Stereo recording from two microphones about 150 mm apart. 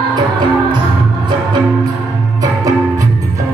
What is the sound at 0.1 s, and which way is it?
Music, 30° right (ahead or behind).